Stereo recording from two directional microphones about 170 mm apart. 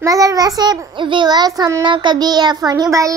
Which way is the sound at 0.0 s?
20° right (ahead or behind).